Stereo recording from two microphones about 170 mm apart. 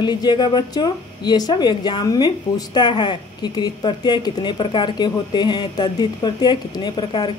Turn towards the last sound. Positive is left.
turn(degrees=25)  # may be behind; listen again after turning